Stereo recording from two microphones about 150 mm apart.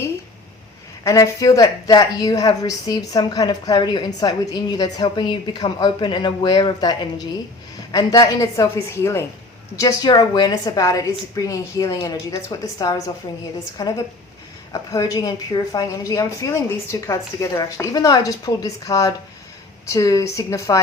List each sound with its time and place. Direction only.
1.0 s a woman's voice: 20° left (ahead or behind)
7.9 s a woman's voice: 25° left (ahead or behind)
9.7 s a woman's voice: 25° left (ahead or behind)